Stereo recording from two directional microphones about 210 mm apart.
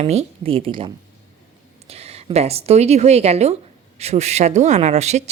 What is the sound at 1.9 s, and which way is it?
Speech, 30° right (ahead or behind).